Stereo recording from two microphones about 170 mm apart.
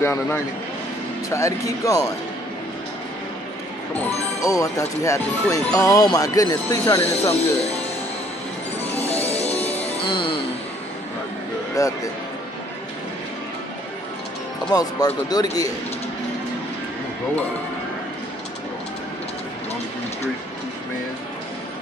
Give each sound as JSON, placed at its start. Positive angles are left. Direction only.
{"t": 0.0, "sound": "speech", "side_deg": 15}
{"t": 4.4, "sound": "speech", "side_deg": 20}
{"t": 10.0, "sound": "speech", "side_deg": 30}
{"t": 11.8, "sound": "speech", "side_deg": 20}
{"t": 14.7, "sound": "speech", "side_deg": 20}